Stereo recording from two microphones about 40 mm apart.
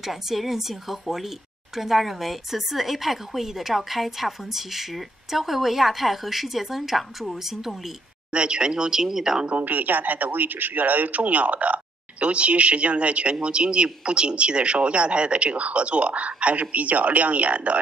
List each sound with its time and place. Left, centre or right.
0.0 s a woman's voice: centre
8.3 s speech: right
9.6 s speech: right